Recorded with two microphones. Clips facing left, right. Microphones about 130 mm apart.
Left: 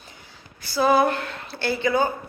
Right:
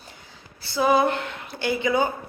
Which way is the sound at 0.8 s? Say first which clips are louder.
Left 1 dB; 20° right (ahead or behind).